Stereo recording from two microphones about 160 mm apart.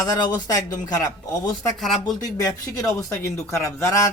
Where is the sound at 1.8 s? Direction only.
Centre (ahead or behind).